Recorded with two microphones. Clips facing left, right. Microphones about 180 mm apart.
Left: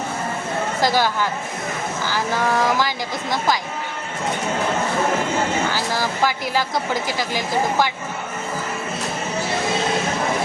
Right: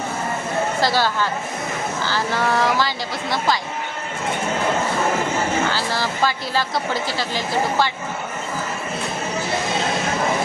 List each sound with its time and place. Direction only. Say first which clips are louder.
0.8 s a woman's voice: left 3 dB; 15° left (ahead or behind)
5.7 s a woman's voice: even; 15° left (ahead or behind)